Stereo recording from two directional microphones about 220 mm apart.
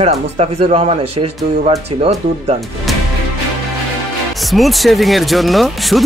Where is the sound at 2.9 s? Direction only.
Centre (ahead or behind).